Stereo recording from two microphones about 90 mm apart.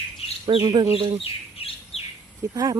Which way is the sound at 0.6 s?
45° right (ahead or behind).